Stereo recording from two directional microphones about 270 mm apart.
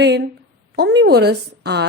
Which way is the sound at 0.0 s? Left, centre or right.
Right.